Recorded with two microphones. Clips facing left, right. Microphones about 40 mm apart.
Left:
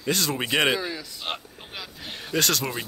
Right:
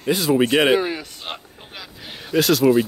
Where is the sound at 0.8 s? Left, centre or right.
Right.